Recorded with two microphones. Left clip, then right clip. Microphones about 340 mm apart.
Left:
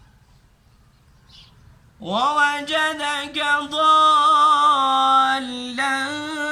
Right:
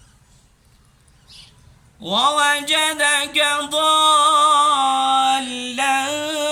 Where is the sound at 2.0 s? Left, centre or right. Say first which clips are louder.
Right 2 dB; centre.